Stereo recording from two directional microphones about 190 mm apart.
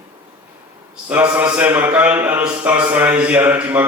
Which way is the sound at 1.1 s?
10° right (ahead or behind).